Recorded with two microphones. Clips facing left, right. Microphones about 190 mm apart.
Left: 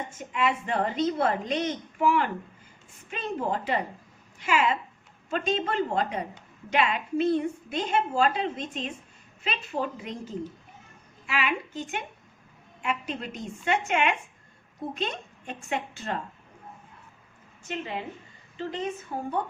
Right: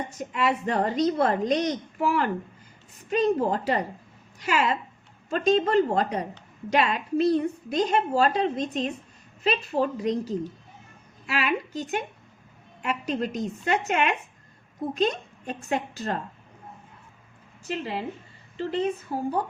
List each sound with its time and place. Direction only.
0.1 s a woman's voice: 40° right (ahead or behind)
17.6 s a woman's voice: 35° right (ahead or behind)